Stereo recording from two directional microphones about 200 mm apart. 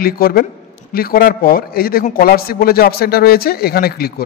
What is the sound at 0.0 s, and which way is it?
A man's voice, 45° left (ahead or behind).